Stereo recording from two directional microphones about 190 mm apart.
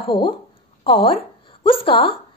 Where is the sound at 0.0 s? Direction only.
30° left (ahead or behind).